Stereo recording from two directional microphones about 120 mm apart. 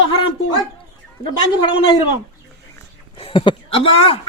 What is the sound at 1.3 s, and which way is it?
Speech, 40° left (ahead or behind).